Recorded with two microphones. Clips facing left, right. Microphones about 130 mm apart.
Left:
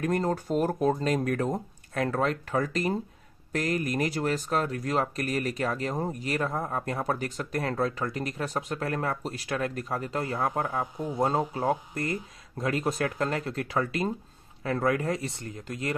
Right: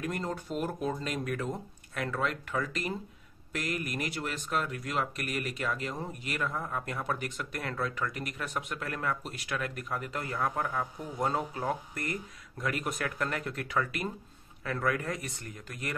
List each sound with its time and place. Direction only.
0.0 s speech: 40° left (ahead or behind)